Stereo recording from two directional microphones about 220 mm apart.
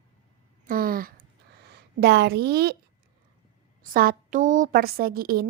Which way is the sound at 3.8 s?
40° right (ahead or behind).